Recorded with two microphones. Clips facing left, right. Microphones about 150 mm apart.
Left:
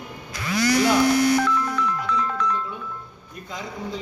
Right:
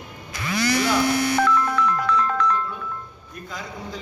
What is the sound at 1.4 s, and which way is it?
Music, 60° right (ahead or behind).